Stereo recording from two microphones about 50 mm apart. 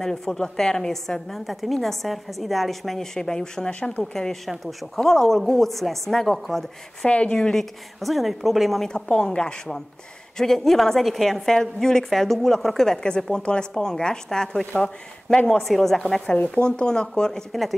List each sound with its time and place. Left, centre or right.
0.0 s a woman's voice: centre
4.0 s a woman's voice: centre
5.0 s a woman's voice: centre
7.1 s a woman's voice: left
7.3 s a woman's voice: centre
8.0 s a woman's voice: centre
8.8 s a woman's voice: centre